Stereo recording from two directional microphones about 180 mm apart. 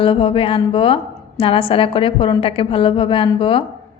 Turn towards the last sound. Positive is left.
turn(degrees=30)  # may be behind; listen again after turning